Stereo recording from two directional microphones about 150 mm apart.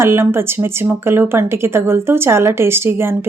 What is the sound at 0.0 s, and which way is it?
A woman's voice, 15° right (ahead or behind).